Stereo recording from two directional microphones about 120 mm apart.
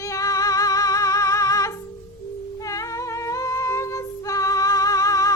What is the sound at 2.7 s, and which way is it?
Singing, 25° left (ahead or behind).